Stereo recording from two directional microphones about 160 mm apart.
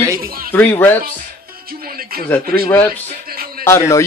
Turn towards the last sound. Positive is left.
turn(degrees=15)  # may be behind; listen again after turning